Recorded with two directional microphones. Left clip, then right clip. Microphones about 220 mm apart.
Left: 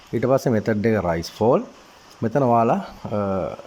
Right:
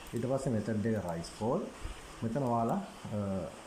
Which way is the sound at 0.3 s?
40° left (ahead or behind).